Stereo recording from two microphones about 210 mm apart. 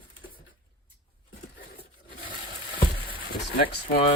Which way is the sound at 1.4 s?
45° left (ahead or behind).